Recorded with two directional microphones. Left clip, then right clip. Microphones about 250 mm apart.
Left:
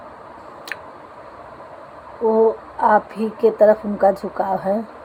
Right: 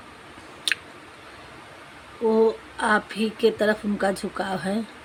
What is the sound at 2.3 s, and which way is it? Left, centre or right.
Speech, right.